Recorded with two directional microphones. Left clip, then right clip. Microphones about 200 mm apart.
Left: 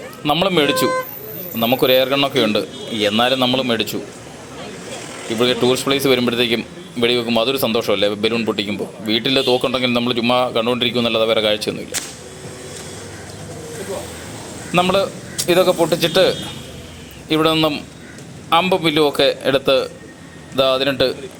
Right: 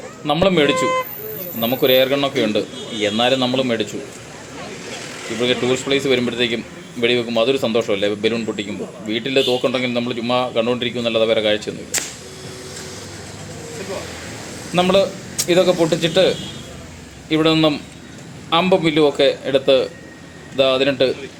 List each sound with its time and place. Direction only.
0.3 s speech: 15° left (ahead or behind)
5.4 s speech: 15° left (ahead or behind)
14.7 s a man's voice: 15° left (ahead or behind)